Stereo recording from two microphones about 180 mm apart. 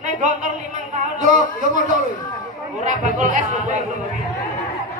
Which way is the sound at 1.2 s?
45° right (ahead or behind).